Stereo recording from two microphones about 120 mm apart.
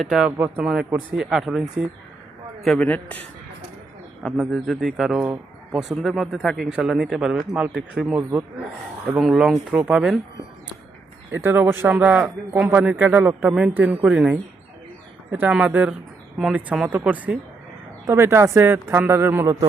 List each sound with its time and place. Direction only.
0.0 s speech: 5° right (ahead or behind)
0.3 s a man's voice: 15° right (ahead or behind)
0.6 s speech: 5° right (ahead or behind)
2.6 s a man's voice: 10° left (ahead or behind)
4.2 s speech: centre (ahead or behind)
11.3 s a man's voice: 15° right (ahead or behind)
18.0 s a man's voice: 20° right (ahead or behind)